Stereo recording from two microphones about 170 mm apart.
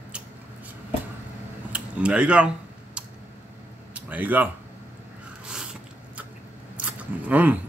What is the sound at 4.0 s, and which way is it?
Speech, 10° right (ahead or behind).